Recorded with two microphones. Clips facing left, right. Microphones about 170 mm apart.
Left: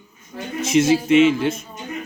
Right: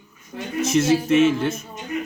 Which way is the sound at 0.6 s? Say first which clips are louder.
Left 2 dB; 20° left (ahead or behind).